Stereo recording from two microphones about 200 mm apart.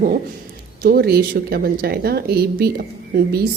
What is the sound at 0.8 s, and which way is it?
A woman's voice, 50° right (ahead or behind).